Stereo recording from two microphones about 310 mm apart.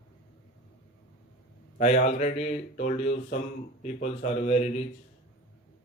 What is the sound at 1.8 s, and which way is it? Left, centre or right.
Speech, left.